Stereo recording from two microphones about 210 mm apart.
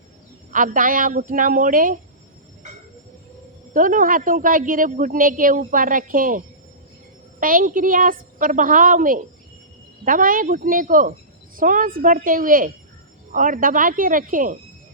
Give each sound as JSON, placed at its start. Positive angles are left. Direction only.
{"t": 0.5, "sound": "a woman's voice", "side_deg": -40}
{"t": 3.8, "sound": "a woman's voice", "side_deg": -40}